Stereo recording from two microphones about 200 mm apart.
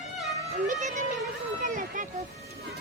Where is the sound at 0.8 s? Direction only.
35° right (ahead or behind).